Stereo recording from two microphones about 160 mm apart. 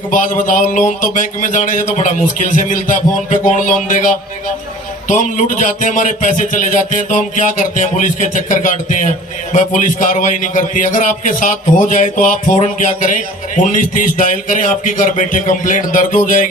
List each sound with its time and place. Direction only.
0.1 s a man's voice: 55° left (ahead or behind)